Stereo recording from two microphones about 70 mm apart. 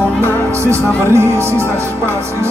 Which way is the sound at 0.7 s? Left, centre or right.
Right.